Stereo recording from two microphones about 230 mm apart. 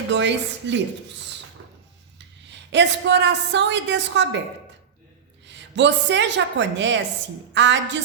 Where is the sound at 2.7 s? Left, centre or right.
Right.